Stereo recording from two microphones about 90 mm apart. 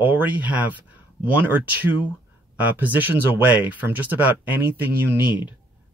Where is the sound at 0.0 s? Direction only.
20° right (ahead or behind).